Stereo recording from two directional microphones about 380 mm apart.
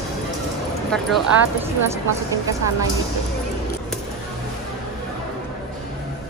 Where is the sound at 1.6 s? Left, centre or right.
Centre.